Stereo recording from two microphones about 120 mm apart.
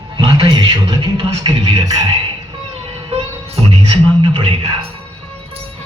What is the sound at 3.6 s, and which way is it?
Music, 55° right (ahead or behind).